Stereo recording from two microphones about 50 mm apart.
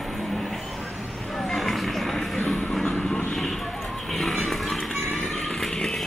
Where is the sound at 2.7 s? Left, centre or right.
Centre.